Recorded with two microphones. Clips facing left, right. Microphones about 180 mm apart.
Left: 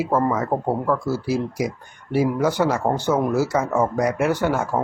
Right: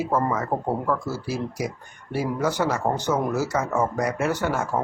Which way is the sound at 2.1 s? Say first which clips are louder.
Left 5 dB; 10° left (ahead or behind).